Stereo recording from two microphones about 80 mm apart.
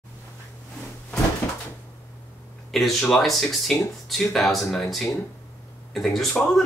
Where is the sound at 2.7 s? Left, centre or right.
Centre.